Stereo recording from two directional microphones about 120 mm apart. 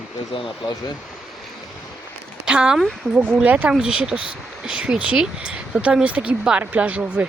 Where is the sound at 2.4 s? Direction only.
5° right (ahead or behind).